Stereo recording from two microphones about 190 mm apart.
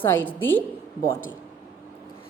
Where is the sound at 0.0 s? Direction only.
10° left (ahead or behind).